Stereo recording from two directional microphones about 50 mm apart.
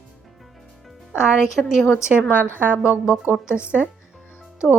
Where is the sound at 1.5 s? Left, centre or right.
Centre.